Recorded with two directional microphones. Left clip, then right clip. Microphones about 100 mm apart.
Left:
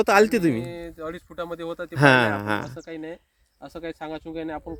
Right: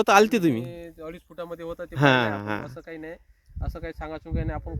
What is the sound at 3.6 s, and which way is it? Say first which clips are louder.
Speech: left 2 dB; 25° right (ahead or behind).